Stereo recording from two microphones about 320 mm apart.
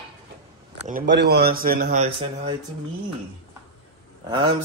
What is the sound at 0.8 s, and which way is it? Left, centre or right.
Speech, right.